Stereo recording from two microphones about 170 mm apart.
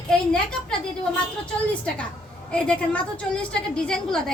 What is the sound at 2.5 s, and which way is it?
A woman's voice, 5° left (ahead or behind).